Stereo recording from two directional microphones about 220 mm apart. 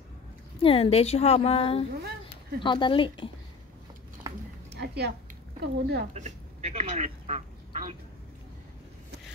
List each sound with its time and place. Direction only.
0.6 s a woman's voice: 25° left (ahead or behind)
4.6 s a sound: 50° right (ahead or behind)
5.6 s speech: 45° right (ahead or behind)
6.1 s quack: 30° right (ahead or behind)